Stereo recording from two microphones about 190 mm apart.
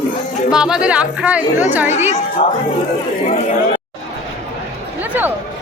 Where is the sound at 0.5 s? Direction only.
5° right (ahead or behind).